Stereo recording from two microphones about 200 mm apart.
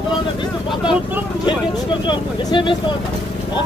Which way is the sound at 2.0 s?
25° left (ahead or behind).